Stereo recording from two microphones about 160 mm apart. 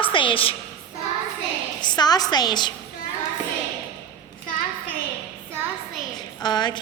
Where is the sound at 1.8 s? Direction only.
25° left (ahead or behind).